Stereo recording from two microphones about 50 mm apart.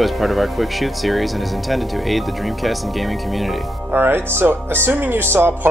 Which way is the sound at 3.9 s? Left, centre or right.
Right.